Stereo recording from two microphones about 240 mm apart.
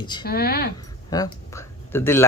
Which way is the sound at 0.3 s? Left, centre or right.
Left.